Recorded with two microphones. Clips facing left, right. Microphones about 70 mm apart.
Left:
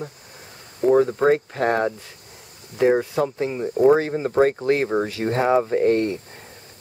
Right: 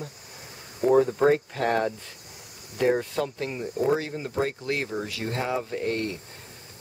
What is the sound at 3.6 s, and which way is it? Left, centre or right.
Speech, left.